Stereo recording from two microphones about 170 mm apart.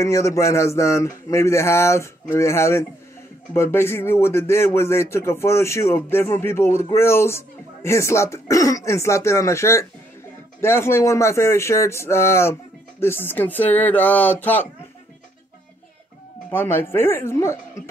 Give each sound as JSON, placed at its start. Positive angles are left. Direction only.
{"t": 0.0, "sound": "speech", "side_deg": 15}
{"t": 16.4, "sound": "speech", "side_deg": 15}